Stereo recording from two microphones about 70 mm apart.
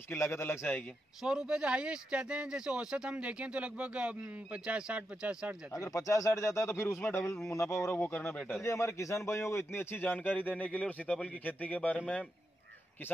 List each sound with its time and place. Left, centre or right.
0.1 s a man's voice: left
1.2 s speech: centre
5.7 s speech: left
7.0 s speech: left
7.7 s a man's voice: left
8.0 s speech: left
8.6 s speech: left